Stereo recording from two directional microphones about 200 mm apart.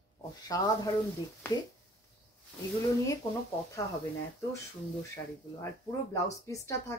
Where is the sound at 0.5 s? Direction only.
15° left (ahead or behind).